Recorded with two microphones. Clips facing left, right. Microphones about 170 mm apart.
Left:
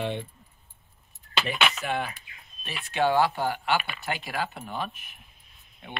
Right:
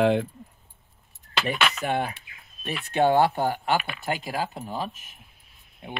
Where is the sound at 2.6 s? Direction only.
50° right (ahead or behind).